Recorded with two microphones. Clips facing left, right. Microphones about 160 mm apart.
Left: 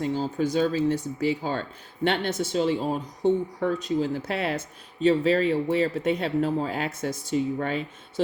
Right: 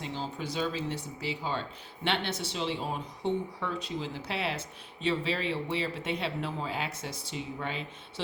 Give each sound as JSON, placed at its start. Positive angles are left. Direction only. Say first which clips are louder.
{"t": 0.0, "sound": "speech", "louder": "left 11 dB", "side_deg": 45}